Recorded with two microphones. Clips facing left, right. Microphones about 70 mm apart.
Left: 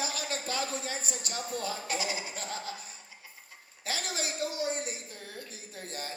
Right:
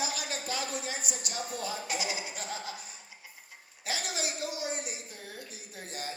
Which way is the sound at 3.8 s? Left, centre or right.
Left.